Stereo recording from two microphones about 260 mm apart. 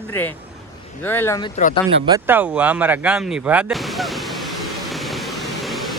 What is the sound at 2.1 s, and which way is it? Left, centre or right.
Speech, centre.